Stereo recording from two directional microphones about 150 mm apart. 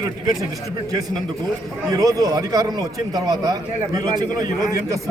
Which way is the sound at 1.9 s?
25° right (ahead or behind).